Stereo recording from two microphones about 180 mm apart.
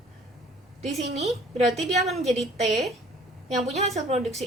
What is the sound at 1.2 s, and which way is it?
Speech, centre (ahead or behind).